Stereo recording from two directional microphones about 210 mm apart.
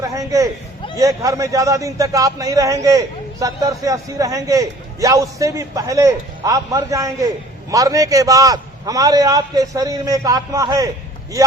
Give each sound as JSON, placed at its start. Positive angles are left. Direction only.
{"t": 0.0, "sound": "a man's voice", "side_deg": -15}